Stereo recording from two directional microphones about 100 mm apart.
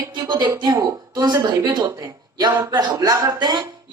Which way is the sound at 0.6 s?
40° right (ahead or behind).